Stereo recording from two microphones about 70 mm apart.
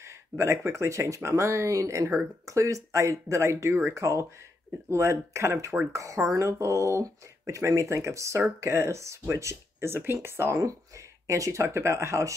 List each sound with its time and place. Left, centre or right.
0.0 s speech: right